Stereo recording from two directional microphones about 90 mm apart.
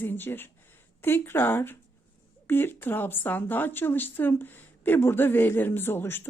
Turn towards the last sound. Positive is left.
turn(degrees=25)  # may be behind; listen again after turning